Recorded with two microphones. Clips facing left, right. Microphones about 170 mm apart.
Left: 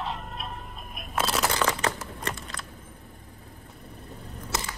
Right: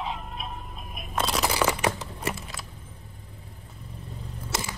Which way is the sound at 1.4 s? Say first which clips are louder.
Right 2 dB; 10° right (ahead or behind).